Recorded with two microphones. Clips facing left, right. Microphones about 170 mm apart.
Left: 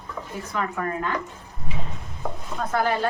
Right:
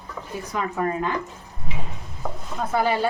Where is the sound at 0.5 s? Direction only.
20° right (ahead or behind).